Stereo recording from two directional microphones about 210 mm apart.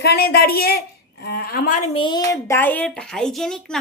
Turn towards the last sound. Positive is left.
turn(degrees=0)  # may be behind; listen again after turning